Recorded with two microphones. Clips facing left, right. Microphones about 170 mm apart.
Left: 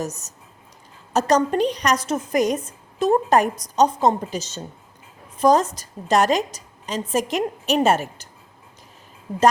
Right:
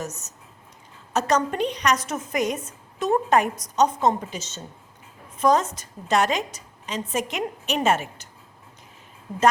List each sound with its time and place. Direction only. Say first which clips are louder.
0.0 s a woman's voice: left 4 dB; 35° left (ahead or behind)